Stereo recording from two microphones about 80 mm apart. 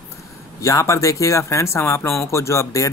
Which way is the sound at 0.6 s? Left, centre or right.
Left.